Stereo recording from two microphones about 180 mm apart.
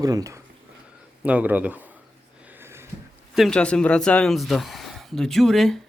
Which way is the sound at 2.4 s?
10° right (ahead or behind).